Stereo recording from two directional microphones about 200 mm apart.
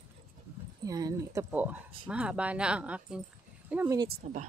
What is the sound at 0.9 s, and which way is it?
Speech, 20° right (ahead or behind).